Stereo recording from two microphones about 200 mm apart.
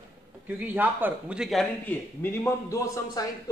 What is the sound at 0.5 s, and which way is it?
A man's voice, 10° right (ahead or behind).